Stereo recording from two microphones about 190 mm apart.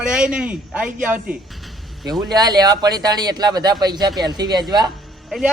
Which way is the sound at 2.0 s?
20° right (ahead or behind).